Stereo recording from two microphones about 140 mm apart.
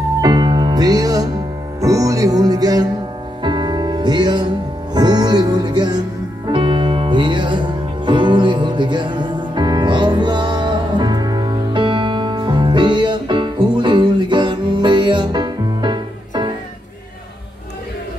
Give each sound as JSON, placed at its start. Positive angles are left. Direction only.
{"t": 0.2, "sound": "music", "side_deg": -25}